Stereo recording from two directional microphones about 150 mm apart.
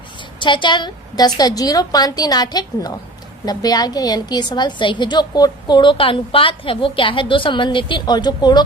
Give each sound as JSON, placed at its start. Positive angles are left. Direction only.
{"t": 0.3, "sound": "a woman's voice", "side_deg": 30}